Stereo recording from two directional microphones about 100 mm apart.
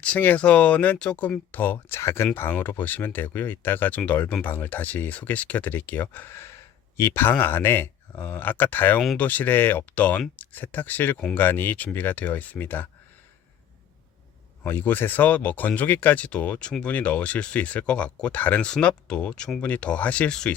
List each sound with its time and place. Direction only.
0.0 s speech: 15° left (ahead or behind)
14.6 s speech: 20° left (ahead or behind)